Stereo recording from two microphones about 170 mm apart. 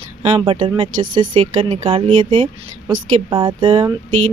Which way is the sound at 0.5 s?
30° right (ahead or behind).